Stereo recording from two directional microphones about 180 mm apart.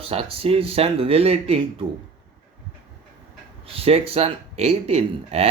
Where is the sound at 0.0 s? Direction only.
30° right (ahead or behind).